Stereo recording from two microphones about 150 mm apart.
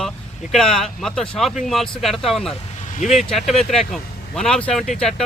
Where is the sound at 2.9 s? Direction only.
55° left (ahead or behind).